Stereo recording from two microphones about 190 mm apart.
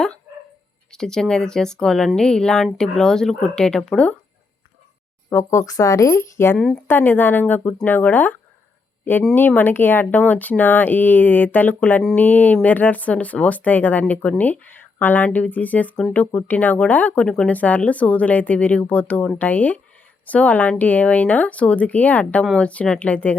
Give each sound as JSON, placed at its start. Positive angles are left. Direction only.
{"t": 0.9, "sound": "speech", "side_deg": 5}
{"t": 5.3, "sound": "speech", "side_deg": 15}